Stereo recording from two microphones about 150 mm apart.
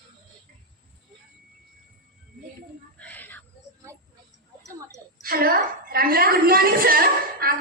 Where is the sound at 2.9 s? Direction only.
10° left (ahead or behind).